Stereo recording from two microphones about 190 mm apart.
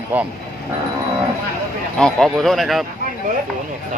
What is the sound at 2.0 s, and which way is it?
Speech, 5° left (ahead or behind).